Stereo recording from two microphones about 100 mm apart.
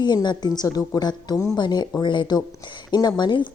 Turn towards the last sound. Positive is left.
turn(degrees=50)  # may be behind; listen again after turning